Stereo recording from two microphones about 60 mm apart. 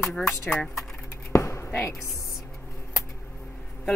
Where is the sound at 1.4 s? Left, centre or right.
Left.